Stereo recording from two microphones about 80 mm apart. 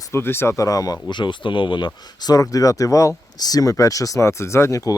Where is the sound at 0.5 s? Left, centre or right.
Left.